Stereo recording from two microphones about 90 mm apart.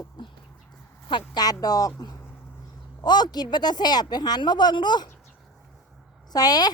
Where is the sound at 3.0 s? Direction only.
50° left (ahead or behind).